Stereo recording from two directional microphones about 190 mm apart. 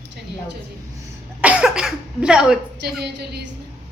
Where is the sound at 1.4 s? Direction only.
5° right (ahead or behind).